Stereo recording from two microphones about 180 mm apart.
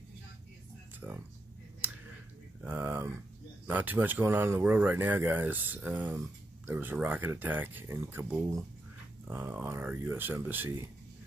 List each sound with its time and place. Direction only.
1.0 s speech: 10° right (ahead or behind)
2.6 s speech: 10° right (ahead or behind)